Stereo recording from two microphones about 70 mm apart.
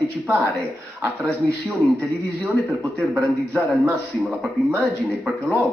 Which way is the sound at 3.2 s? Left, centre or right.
Centre.